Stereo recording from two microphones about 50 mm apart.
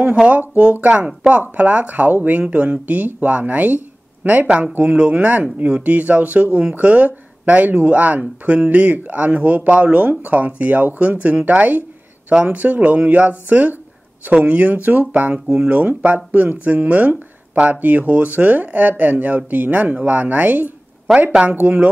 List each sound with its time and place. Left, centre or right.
0.1 s speech: right